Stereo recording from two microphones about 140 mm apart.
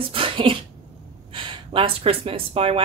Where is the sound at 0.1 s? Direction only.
40° right (ahead or behind).